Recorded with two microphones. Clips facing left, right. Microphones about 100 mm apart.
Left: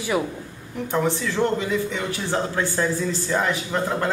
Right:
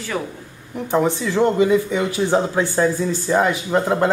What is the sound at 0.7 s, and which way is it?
Speech, 15° right (ahead or behind).